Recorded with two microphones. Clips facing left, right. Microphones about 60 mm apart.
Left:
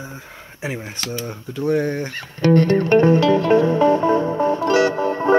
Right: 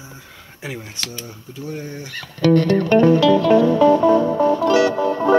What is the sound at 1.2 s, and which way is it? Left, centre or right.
Speech, left.